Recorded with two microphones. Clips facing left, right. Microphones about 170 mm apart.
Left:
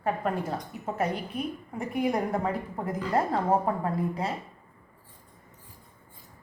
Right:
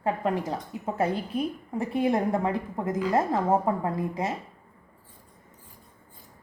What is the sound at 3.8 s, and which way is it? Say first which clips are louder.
Speech: right 1 dB; 20° right (ahead or behind).